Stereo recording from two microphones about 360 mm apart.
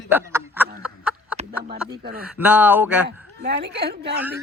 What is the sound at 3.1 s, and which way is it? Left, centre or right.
Speech, right.